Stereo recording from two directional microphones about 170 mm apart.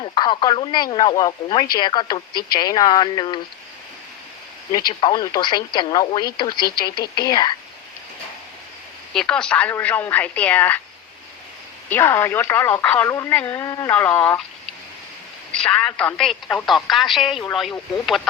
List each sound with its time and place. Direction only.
0.0 s speech: 30° left (ahead or behind)
4.7 s speech: 25° left (ahead or behind)
9.1 s speech: 5° left (ahead or behind)
11.9 s speech: 15° left (ahead or behind)
15.5 s speech: 5° left (ahead or behind)